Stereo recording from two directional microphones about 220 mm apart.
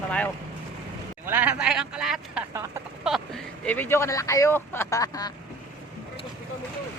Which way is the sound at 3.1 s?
5° right (ahead or behind).